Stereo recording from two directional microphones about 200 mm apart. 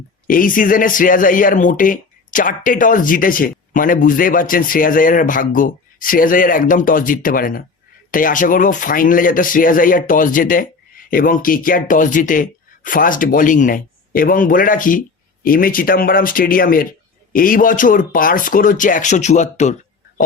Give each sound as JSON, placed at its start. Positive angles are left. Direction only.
{"t": 0.3, "sound": "speech", "side_deg": 45}